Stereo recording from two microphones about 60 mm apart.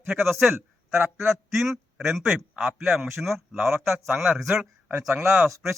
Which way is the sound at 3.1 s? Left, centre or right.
Centre.